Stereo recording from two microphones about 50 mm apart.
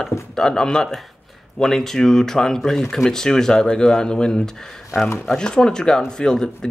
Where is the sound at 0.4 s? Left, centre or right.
Centre.